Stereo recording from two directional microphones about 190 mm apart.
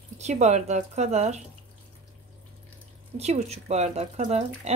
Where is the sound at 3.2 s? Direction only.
35° right (ahead or behind).